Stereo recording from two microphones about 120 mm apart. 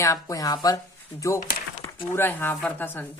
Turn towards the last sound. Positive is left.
turn(degrees=15)  # may be behind; listen again after turning